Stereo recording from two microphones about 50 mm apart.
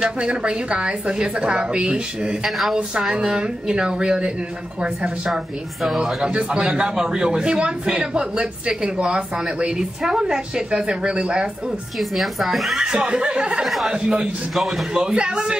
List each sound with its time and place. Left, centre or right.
0.2 s a woman's voice: centre
2.4 s a man's voice: centre
12.0 s speech: centre
12.8 s a man's voice: centre
14.5 s speech: centre
15.0 s a man's voice: centre